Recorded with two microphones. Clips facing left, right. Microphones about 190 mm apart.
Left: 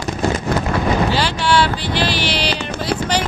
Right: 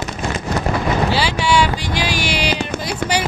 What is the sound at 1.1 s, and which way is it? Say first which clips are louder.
Vehicle: even; 10° right (ahead or behind).